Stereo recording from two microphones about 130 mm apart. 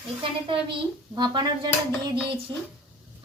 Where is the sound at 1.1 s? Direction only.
35° right (ahead or behind).